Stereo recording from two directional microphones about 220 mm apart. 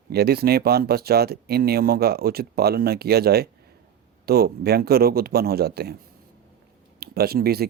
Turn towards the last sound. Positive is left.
turn(degrees=-45)  # may be behind; listen again after turning